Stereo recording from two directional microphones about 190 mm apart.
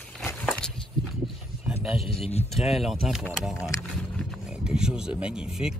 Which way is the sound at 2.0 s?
30° left (ahead or behind).